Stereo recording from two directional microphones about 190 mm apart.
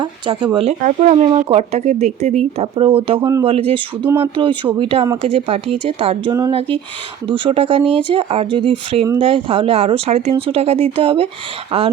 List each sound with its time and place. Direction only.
0.0 s speech: 25° right (ahead or behind); by 1.1 s 40° right (ahead or behind)
1.1 s speech: 30° right (ahead or behind)
4.0 s speech: 10° right (ahead or behind)
4.4 s speech: 25° right (ahead or behind)